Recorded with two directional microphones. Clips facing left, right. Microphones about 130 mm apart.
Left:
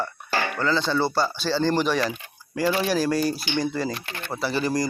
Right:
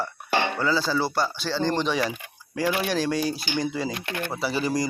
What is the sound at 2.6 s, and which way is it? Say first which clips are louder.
Speech: left 2 dB; 10° right (ahead or behind).